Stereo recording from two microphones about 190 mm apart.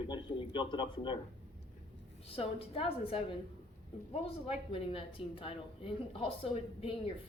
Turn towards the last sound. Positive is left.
turn(degrees=30)  # may be behind; listen again after turning